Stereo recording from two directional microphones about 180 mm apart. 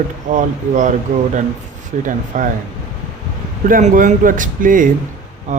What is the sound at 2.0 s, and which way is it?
Speech, 45° right (ahead or behind).